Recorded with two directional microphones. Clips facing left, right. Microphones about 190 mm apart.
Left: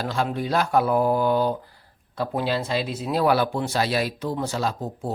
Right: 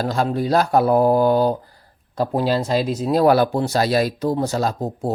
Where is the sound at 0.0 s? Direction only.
40° right (ahead or behind).